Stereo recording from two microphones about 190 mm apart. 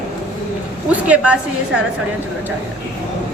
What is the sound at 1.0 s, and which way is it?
Speech, 5° right (ahead or behind).